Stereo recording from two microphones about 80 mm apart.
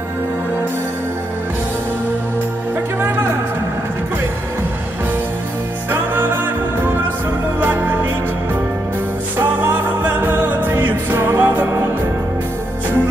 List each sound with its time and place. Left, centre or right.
3.0 s music: right
5.9 s music: right
9.4 s music: right